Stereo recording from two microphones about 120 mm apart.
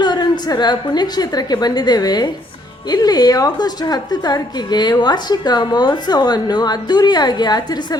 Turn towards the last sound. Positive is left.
turn(degrees=35)  # may be behind; listen again after turning